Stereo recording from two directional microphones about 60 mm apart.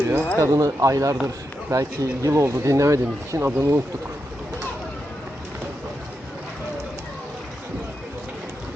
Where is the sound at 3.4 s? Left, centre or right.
Right.